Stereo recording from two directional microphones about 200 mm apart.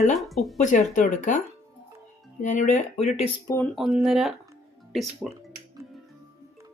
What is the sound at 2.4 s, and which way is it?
Speech, 35° left (ahead or behind).